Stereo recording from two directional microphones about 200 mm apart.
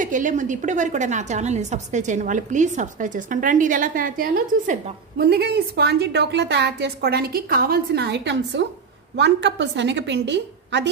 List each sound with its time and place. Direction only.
0.0 s a woman's voice: 40° right (ahead or behind); by 10.9 s 60° right (ahead or behind)